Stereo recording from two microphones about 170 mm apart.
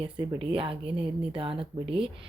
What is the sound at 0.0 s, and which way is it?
Speech, 30° right (ahead or behind).